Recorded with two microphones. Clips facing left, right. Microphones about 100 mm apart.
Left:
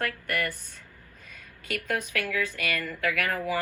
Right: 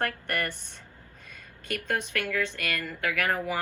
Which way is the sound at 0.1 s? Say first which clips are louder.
Left 1 dB; 30° right (ahead or behind).